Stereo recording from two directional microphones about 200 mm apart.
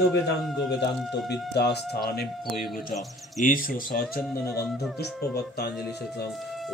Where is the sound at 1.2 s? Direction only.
55° left (ahead or behind).